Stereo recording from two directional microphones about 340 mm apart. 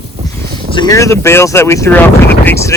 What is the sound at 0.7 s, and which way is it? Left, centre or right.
Speech, centre.